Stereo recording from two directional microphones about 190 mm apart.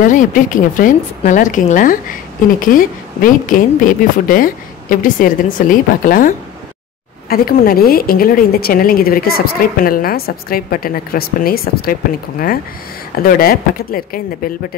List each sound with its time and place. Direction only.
0.0 s a woman's voice: 45° left (ahead or behind)